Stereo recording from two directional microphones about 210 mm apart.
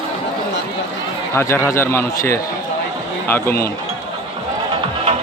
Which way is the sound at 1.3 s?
10° left (ahead or behind).